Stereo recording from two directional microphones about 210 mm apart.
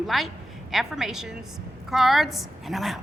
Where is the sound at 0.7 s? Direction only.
Centre (ahead or behind).